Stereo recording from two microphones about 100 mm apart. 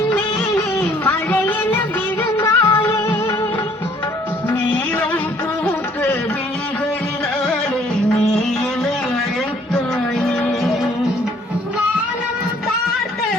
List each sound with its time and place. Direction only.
0.8 s music: 15° left (ahead or behind)
5.6 s a sound: 25° left (ahead or behind)
10.2 s music: 5° left (ahead or behind)